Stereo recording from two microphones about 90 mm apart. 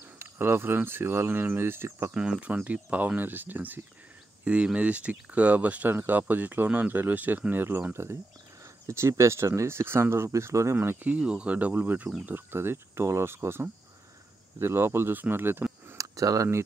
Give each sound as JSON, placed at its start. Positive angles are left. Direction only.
{"t": 0.2, "sound": "speech", "side_deg": -25}
{"t": 2.1, "sound": "speech", "side_deg": -10}
{"t": 16.0, "sound": "speech", "side_deg": -40}